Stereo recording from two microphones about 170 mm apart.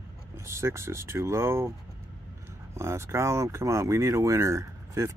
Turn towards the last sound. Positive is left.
turn(degrees=-15)  # may be behind; listen again after turning